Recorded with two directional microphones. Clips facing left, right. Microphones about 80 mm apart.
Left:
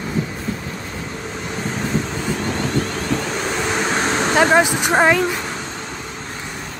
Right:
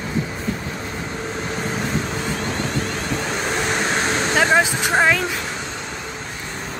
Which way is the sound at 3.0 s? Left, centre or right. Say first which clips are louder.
Left 2 dB; centre.